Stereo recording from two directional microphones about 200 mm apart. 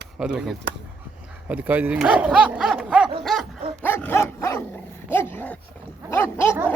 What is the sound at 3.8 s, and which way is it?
Dog, 10° left (ahead or behind).